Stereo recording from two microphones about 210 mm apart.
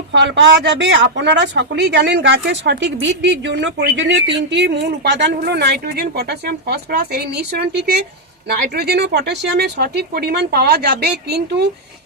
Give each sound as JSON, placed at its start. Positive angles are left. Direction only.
{"t": 0.1, "sound": "speech", "side_deg": -60}